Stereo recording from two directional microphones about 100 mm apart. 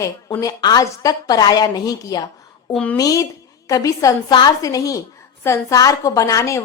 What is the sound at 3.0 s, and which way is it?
A woman's voice, 35° left (ahead or behind).